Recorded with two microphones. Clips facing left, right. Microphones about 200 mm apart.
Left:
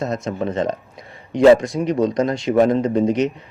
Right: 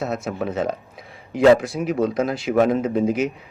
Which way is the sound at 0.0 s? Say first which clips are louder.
Left 2 dB; 5° right (ahead or behind).